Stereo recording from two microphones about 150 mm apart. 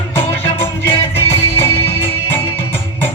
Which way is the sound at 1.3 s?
15° left (ahead or behind).